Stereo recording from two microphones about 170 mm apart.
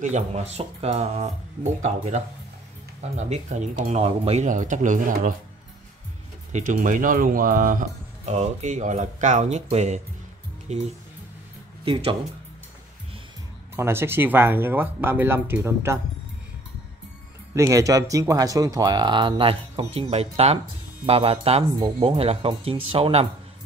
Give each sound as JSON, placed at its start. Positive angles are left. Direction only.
{"t": 0.0, "sound": "speech", "side_deg": -45}
{"t": 6.5, "sound": "speech", "side_deg": -50}
{"t": 8.3, "sound": "speech", "side_deg": -40}
{"t": 13.7, "sound": "speech", "side_deg": -15}
{"t": 17.6, "sound": "speech", "side_deg": -20}